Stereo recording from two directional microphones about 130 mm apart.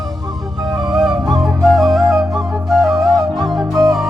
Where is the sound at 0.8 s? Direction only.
5° right (ahead or behind).